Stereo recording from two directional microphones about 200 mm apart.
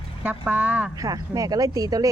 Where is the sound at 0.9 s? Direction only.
15° right (ahead or behind).